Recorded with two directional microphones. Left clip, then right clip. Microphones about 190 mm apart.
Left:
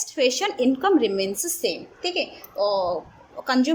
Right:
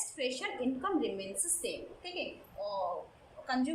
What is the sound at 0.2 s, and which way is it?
A woman's voice, 60° left (ahead or behind).